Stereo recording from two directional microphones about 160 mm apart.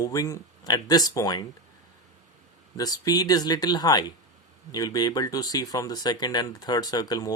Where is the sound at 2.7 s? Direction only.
25° left (ahead or behind).